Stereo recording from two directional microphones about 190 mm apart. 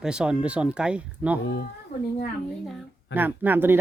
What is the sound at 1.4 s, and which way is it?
Speech, 60° left (ahead or behind).